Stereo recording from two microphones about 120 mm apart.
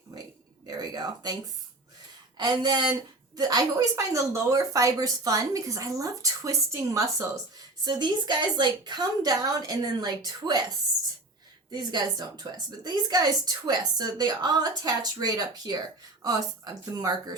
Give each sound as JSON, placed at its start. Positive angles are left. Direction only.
{"t": 0.8, "sound": "speech", "side_deg": -35}
{"t": 2.4, "sound": "a woman's voice", "side_deg": -35}
{"t": 7.9, "sound": "a woman's voice", "side_deg": -40}
{"t": 11.7, "sound": "a woman's voice", "side_deg": -35}